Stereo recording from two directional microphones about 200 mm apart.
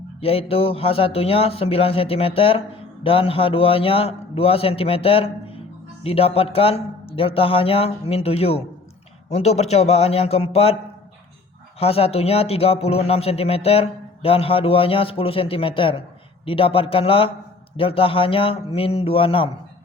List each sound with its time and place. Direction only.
0.2 s a man's voice: 30° left (ahead or behind)
11.8 s speech: 30° left (ahead or behind)